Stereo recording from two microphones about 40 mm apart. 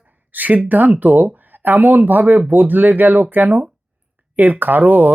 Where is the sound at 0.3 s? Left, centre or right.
Right.